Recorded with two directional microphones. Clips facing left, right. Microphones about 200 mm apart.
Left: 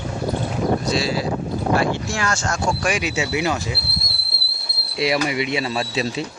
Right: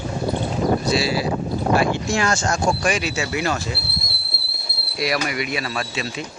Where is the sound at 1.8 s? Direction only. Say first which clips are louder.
Right 2 dB; 20° right (ahead or behind).